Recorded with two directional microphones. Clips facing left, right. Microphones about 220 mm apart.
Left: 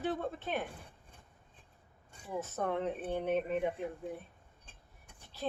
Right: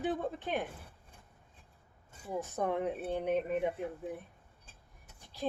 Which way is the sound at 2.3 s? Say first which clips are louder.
Right 1 dB; 15° right (ahead or behind).